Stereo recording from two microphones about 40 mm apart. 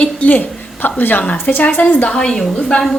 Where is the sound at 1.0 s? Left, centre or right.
Left.